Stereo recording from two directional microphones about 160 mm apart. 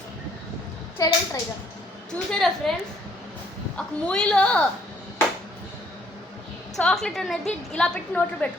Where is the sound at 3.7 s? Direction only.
5° left (ahead or behind).